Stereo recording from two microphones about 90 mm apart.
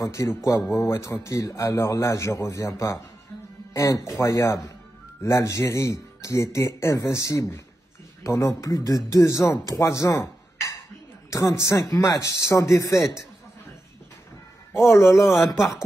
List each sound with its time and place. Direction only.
0.0 s speech: 35° left (ahead or behind)
15.1 s speech: 5° right (ahead or behind)